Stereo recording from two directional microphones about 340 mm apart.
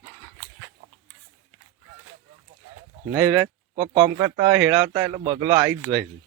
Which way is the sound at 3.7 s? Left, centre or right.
Centre.